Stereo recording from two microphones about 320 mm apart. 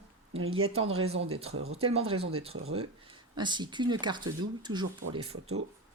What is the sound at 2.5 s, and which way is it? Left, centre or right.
Speech, right.